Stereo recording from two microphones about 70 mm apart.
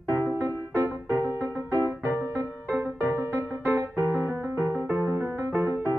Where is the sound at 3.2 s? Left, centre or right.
Right.